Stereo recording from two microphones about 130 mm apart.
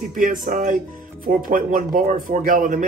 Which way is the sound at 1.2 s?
90° right.